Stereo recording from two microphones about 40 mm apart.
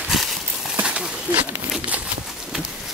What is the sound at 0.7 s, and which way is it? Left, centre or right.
Horse, right.